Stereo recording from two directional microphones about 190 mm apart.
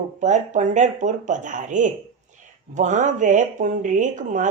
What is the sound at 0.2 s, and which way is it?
Speech, 40° right (ahead or behind).